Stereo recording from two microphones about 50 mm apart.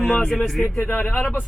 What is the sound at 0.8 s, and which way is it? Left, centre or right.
Speech, left.